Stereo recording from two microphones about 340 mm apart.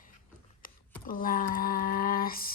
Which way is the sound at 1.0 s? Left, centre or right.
Left.